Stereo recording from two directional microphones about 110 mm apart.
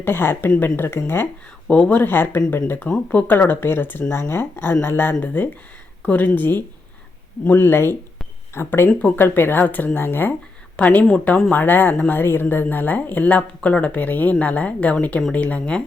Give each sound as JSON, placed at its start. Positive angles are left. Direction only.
{"t": 0.0, "sound": "speech", "side_deg": 20}
{"t": 0.5, "sound": "speech", "side_deg": 10}
{"t": 0.8, "sound": "speech", "side_deg": 20}